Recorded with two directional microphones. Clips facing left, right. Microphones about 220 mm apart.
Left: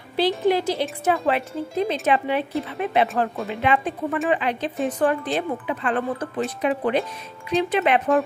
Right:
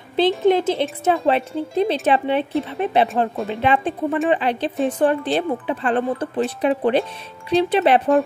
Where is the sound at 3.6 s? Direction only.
30° right (ahead or behind).